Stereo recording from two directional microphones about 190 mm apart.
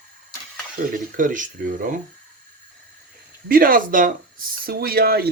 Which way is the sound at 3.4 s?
50° right (ahead or behind).